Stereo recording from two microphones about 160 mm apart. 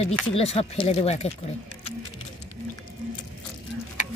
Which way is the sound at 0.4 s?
40° left (ahead or behind).